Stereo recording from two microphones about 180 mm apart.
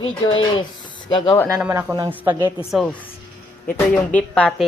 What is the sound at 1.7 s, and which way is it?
Speech, 20° right (ahead or behind).